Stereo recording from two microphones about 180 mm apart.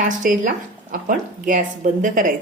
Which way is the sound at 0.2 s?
50° right (ahead or behind).